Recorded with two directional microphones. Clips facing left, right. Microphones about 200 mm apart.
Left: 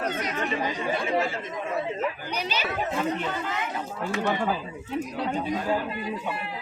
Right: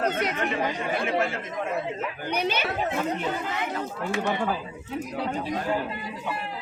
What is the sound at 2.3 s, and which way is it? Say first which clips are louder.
Speech: right 4 dB; 55° right (ahead or behind).